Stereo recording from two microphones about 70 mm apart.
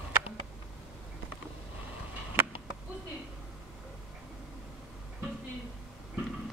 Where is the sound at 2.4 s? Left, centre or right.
Right.